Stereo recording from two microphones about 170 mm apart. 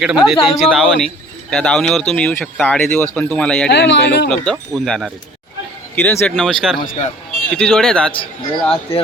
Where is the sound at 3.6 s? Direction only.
85° left.